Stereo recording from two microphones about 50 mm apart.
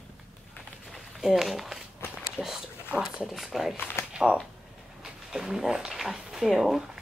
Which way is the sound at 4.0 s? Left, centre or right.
Left.